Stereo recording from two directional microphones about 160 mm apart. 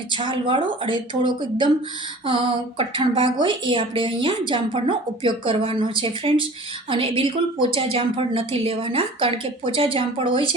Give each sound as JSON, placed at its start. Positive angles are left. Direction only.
{"t": 0.1, "sound": "a woman's voice", "side_deg": -30}